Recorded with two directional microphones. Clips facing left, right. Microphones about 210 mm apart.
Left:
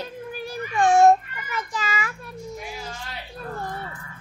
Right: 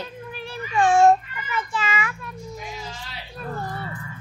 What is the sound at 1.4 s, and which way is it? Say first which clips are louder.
Child singing: right 2 dB; 40° left (ahead or behind).